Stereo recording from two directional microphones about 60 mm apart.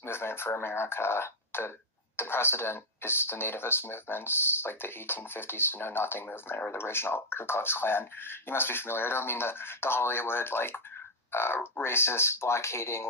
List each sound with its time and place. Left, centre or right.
0.0 s speech: left